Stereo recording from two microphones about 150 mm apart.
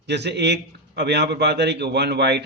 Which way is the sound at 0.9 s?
90° right.